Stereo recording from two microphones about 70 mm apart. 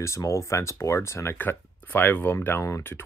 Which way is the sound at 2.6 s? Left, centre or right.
Left.